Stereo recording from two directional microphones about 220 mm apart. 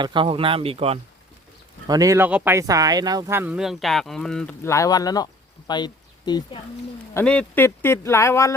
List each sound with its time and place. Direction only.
0.0 s speech: 20° right (ahead or behind)
1.9 s speech: 15° right (ahead or behind); by 6.6 s 20° left (ahead or behind)
7.1 s speech: 5° left (ahead or behind)